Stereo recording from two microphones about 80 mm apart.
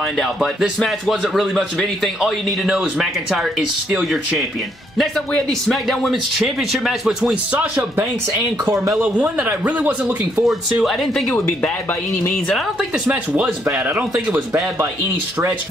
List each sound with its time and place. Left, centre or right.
0.2 s speech: centre
5.3 s speech: centre
7.5 s speech: centre
10.4 s speech: centre